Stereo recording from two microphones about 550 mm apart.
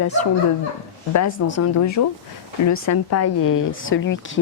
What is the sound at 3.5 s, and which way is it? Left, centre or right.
Speech, left.